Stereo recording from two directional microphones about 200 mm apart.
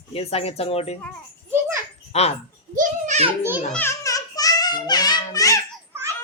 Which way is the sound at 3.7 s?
15° left (ahead or behind).